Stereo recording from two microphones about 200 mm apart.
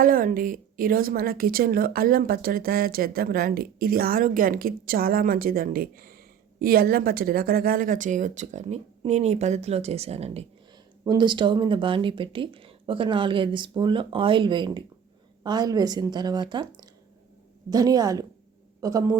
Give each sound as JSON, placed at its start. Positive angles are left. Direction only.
{"t": 0.0, "sound": "a woman's voice", "side_deg": -45}
{"t": 11.0, "sound": "a man's voice", "side_deg": -20}